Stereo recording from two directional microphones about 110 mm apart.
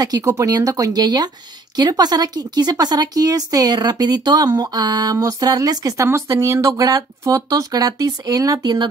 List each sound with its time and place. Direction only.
0.0 s speech: 35° right (ahead or behind)